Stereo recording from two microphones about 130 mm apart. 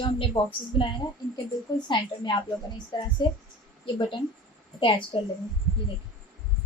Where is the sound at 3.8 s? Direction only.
40° left (ahead or behind).